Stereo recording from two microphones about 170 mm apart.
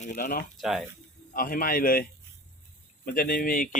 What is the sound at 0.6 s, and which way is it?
Speech, centre (ahead or behind).